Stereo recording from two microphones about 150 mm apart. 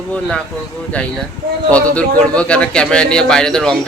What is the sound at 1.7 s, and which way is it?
Speech, 10° left (ahead or behind).